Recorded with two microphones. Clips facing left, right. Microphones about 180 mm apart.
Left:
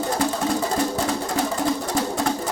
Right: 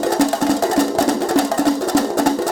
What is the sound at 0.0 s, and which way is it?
Music, 85° right.